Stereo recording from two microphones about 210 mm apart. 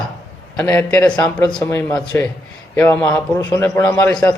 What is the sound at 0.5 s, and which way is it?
A man's voice, 5° left (ahead or behind).